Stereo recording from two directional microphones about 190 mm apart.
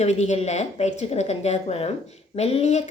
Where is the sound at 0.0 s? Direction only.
35° left (ahead or behind).